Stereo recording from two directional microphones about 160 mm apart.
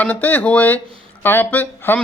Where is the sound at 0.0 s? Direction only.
10° left (ahead or behind).